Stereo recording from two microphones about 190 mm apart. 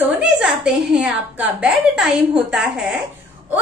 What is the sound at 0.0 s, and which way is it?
A woman's voice, 5° right (ahead or behind).